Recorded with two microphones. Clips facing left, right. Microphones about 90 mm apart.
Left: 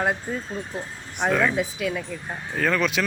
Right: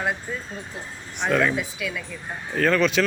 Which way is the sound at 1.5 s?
45° left (ahead or behind).